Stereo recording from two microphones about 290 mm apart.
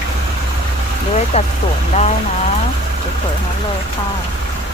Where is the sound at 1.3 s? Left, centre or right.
Left.